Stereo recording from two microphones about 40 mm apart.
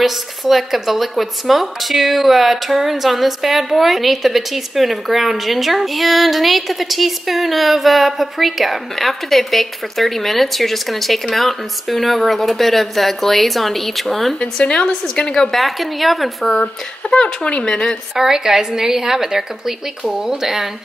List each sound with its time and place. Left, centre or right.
0.0 s speech: centre
14.4 s speech: left
15.5 s speech: centre
17.1 s speech: left
18.1 s a woman's voice: centre